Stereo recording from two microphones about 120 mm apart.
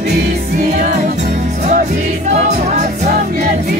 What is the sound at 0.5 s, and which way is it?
Music, 70° right (ahead or behind).